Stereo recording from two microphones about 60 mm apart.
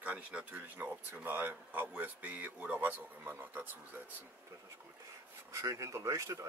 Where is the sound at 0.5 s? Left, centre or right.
Right.